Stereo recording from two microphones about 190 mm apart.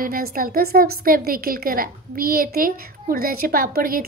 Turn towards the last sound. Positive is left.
turn(degrees=-50)  # may be behind; listen again after turning